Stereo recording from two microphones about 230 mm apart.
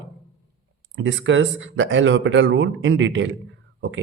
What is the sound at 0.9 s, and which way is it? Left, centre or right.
Speech, right.